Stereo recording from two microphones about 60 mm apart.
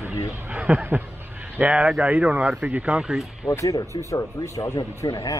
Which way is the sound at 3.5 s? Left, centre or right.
Left.